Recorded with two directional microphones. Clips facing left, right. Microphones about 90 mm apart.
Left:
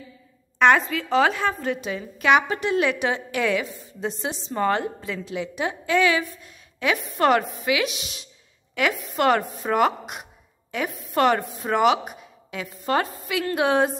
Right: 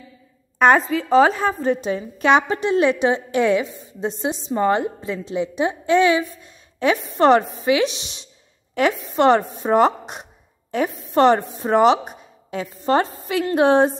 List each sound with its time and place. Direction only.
0.6 s a woman's voice: 35° right (ahead or behind)